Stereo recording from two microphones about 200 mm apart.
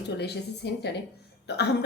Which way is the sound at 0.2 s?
55° left (ahead or behind).